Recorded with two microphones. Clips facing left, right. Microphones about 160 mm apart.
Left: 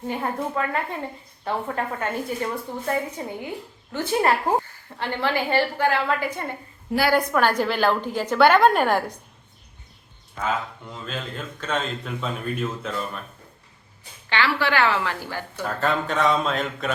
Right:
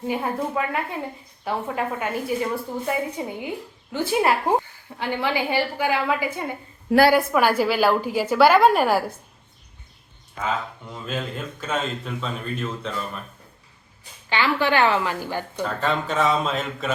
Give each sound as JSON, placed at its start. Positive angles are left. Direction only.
{"t": 0.1, "sound": "a woman's voice", "side_deg": -5}
{"t": 10.9, "sound": "a woman's voice", "side_deg": -10}
{"t": 12.2, "sound": "a woman's voice", "side_deg": 5}
{"t": 14.3, "sound": "a woman's voice", "side_deg": -15}
{"t": 15.6, "sound": "a woman's voice", "side_deg": 0}